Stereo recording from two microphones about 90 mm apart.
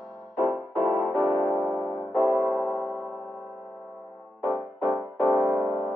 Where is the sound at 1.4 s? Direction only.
20° right (ahead or behind).